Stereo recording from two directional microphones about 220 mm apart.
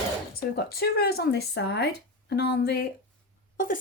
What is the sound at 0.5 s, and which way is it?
Speech, 45° left (ahead or behind).